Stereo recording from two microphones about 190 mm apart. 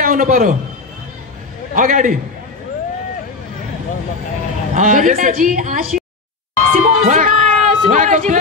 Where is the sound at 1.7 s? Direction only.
45° right (ahead or behind).